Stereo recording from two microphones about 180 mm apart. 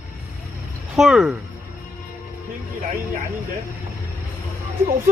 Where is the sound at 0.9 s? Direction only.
Centre (ahead or behind).